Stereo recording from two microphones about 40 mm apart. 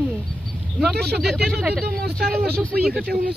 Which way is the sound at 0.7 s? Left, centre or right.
Centre.